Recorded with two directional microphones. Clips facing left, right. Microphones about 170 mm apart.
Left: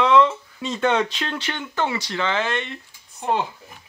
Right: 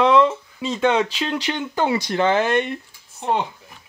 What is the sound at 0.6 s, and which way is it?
Speech, 5° right (ahead or behind).